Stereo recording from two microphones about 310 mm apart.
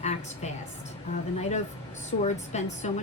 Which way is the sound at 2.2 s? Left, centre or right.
Left.